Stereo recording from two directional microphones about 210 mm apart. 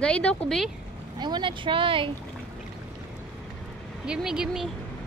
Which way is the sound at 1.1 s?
20° right (ahead or behind).